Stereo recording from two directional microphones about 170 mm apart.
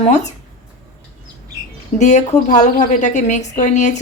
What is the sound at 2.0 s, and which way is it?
Speech, 45° left (ahead or behind).